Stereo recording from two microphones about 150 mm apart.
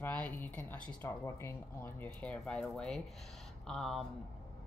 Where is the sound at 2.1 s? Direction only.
5° left (ahead or behind).